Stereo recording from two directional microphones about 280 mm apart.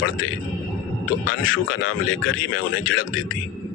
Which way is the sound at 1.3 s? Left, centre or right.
Left.